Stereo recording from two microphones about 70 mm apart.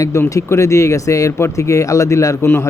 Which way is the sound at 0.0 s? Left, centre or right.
Left.